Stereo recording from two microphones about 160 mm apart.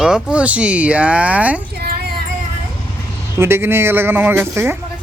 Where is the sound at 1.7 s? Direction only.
75° right (ahead or behind).